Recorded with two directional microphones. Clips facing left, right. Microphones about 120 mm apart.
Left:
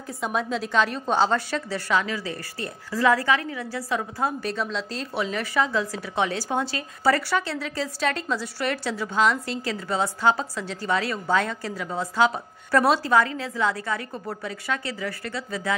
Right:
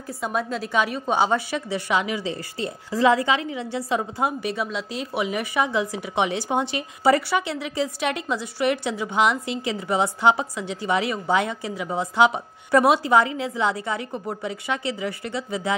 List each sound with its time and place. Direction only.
0.2 s a woman's voice: centre (ahead or behind); by 15.7 s 20° right (ahead or behind)